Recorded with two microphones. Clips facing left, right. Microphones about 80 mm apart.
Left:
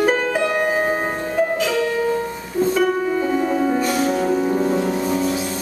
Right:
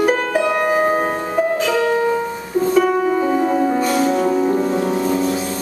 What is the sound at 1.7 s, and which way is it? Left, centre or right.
Music, right.